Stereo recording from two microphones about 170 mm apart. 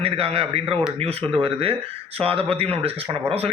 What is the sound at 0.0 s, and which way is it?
A man's voice, 35° right (ahead or behind).